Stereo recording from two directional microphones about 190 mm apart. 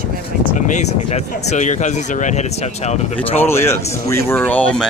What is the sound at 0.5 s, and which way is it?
Speech, 40° left (ahead or behind).